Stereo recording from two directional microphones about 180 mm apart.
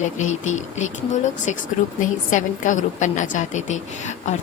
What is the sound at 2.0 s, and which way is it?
A woman's voice, 45° left (ahead or behind).